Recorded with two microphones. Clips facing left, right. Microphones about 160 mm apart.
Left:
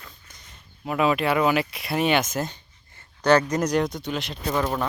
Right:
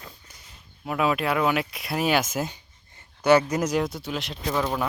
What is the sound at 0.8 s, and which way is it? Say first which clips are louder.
Speech: left 2 dB; centre (ahead or behind).